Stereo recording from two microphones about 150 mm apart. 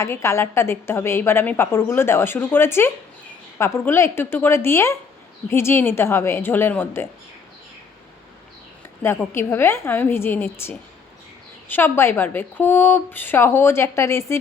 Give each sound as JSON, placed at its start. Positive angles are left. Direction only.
{"t": 0.0, "sound": "a woman's voice", "side_deg": 20}
{"t": 9.0, "sound": "a woman's voice", "side_deg": 15}